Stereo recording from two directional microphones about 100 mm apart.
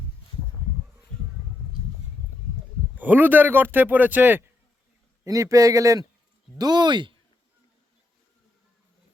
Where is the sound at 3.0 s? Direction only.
15° right (ahead or behind).